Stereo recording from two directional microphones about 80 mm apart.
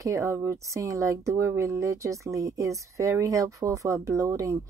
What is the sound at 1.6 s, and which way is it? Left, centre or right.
Speech, right.